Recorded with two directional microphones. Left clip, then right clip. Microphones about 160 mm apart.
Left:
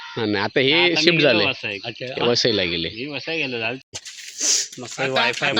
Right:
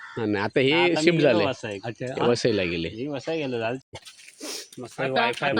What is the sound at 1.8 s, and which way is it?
Speech, 90° right.